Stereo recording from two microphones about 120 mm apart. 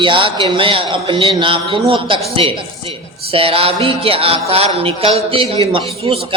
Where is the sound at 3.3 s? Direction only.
50° right (ahead or behind).